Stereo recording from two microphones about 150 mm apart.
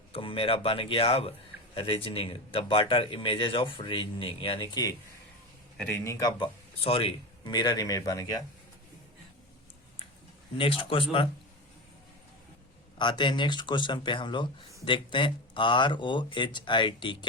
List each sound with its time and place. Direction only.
0.1 s a man's voice: 40° left (ahead or behind)
5.7 s speech: 5° left (ahead or behind)
6.1 s speech: 25° left (ahead or behind)
6.8 s speech: 40° left (ahead or behind)
10.6 s a man's voice: 35° left (ahead or behind)
13.0 s a man's voice: 30° left (ahead or behind)